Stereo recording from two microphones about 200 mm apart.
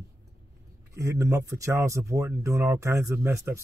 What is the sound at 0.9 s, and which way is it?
Speech, 15° right (ahead or behind).